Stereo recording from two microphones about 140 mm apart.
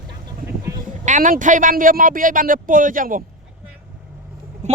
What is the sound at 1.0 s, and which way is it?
Speech, 65° right (ahead or behind).